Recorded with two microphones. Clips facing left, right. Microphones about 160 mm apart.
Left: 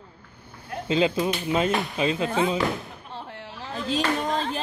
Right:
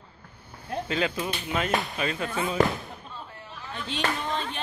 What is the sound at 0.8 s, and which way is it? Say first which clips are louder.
Speech: left 7 dB; 25° left (ahead or behind).